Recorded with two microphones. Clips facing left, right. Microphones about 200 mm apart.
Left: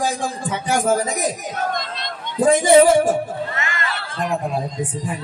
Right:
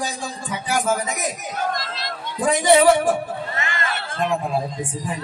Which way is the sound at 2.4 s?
45° left (ahead or behind).